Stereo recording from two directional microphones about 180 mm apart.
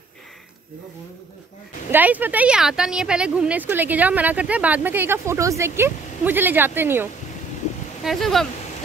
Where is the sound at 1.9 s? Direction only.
10° right (ahead or behind).